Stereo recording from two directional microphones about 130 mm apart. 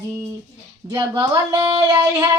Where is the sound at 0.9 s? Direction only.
25° right (ahead or behind).